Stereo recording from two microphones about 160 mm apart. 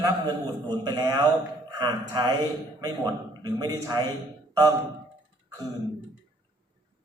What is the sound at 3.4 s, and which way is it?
Speech, 25° right (ahead or behind).